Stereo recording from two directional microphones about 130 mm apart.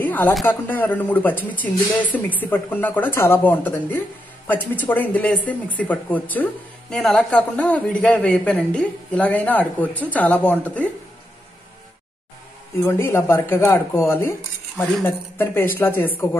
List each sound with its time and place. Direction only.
0.0 s a sound: 15° left (ahead or behind)
0.5 s speech: 15° left (ahead or behind)
12.8 s speech: 20° left (ahead or behind)